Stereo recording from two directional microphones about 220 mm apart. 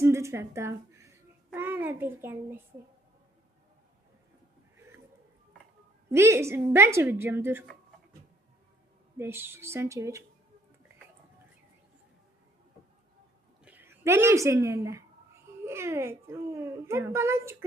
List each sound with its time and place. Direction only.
0.0 s a sound: 10° right (ahead or behind)
1.5 s a child's voice: 10° right (ahead or behind)
6.1 s a child's voice: 10° right (ahead or behind)
9.1 s a child's voice: 10° right (ahead or behind)
13.7 s a woman's voice: 10° right (ahead or behind)